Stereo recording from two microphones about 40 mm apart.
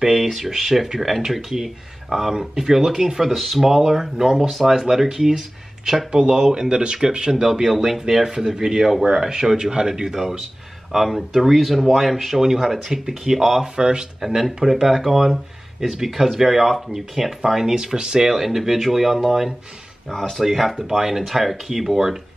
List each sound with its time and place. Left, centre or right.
0.0 s speech: centre
2.3 s speech: centre
13.7 s speech: right
14.2 s speech: centre
17.7 s speech: right
18.3 s speech: centre
20.1 s speech: centre
20.4 s speech: centre